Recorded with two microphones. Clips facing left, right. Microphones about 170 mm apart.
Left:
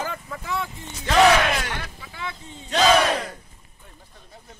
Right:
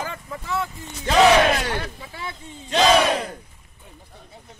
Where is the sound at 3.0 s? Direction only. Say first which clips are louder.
Right 2 dB; 15° right (ahead or behind).